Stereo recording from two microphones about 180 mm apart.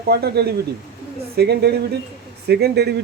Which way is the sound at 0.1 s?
60° right (ahead or behind).